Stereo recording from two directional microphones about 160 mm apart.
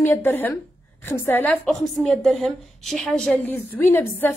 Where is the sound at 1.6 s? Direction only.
Centre (ahead or behind).